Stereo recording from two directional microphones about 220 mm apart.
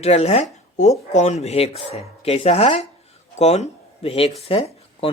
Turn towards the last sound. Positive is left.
turn(degrees=25)  # may be behind; listen again after turning